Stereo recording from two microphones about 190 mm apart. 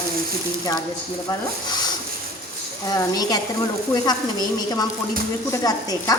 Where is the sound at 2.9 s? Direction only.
20° left (ahead or behind).